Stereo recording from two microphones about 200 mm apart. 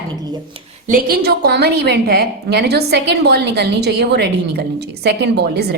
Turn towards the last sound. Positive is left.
turn(degrees=-55)  # may be behind; listen again after turning